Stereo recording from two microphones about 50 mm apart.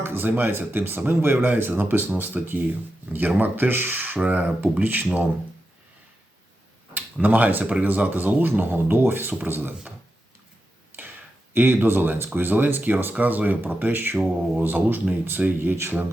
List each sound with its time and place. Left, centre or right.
0.0 s speech: right
6.9 s speech: right
11.5 s speech: right